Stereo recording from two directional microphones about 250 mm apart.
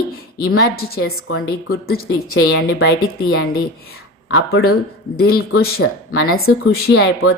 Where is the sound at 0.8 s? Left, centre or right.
Left.